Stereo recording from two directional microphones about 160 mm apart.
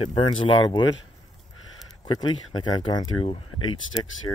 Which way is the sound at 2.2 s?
30° left (ahead or behind).